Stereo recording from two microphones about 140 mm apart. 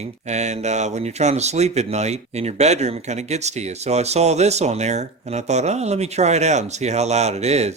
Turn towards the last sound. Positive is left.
turn(degrees=-50)  # may be behind; listen again after turning